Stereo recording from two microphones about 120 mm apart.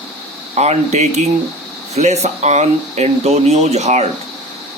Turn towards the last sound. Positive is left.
turn(degrees=-70)  # may be behind; listen again after turning